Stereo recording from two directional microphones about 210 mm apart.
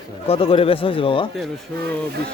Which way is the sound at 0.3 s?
25° left (ahead or behind).